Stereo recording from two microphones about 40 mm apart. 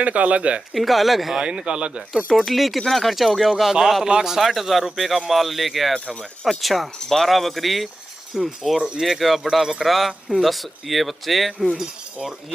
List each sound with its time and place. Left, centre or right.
0.0 s speech: right
0.7 s speech: centre
1.4 s speech: right
2.3 s speech: centre
4.0 s a man's voice: centre
4.4 s speech: centre